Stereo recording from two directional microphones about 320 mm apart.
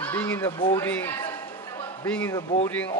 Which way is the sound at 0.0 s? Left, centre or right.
Centre.